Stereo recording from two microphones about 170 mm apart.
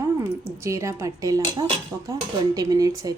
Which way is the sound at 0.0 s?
15° right (ahead or behind).